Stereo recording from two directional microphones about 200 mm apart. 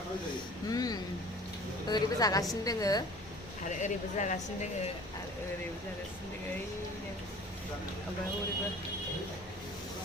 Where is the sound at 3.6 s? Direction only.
35° left (ahead or behind).